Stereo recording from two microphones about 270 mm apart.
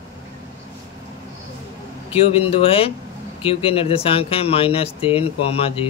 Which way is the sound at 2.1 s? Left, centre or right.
Left.